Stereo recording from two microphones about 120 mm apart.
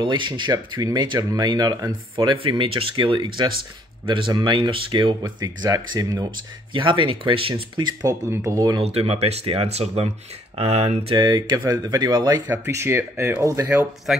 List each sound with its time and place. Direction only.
0.0 s speech: 40° right (ahead or behind)
6.7 s speech: 45° right (ahead or behind)
8.1 s speech: 25° right (ahead or behind)
8.8 s speech: 55° right (ahead or behind)
11.1 s speech: 35° right (ahead or behind)
12.4 s speech: 20° right (ahead or behind)
13.7 s speech: 10° right (ahead or behind)